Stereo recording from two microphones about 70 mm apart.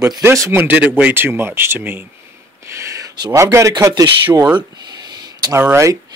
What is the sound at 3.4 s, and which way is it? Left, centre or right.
Speech, right.